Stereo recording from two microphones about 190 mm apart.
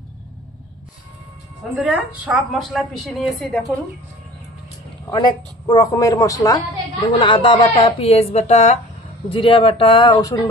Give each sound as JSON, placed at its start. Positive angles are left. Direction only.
{"t": 1.8, "sound": "a woman's voice", "side_deg": -5}
{"t": 5.1, "sound": "a woman's voice", "side_deg": 20}